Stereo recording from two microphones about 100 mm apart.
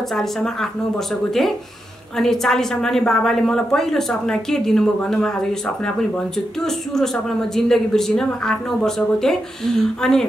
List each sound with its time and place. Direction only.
0.1 s a woman's voice: 5° left (ahead or behind)
2.1 s a woman's voice: 5° left (ahead or behind)
6.6 s a woman's voice: 5° left (ahead or behind)